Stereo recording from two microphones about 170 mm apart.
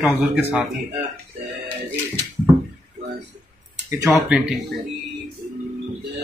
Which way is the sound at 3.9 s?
20° right (ahead or behind).